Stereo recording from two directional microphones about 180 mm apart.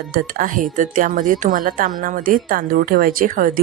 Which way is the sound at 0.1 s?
50° right (ahead or behind).